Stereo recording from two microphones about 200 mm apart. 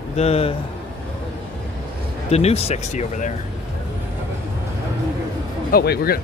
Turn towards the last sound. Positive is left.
turn(degrees=50)  # may be behind; listen again after turning